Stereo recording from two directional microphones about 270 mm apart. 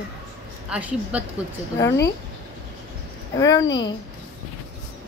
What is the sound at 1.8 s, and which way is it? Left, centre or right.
Speech, centre.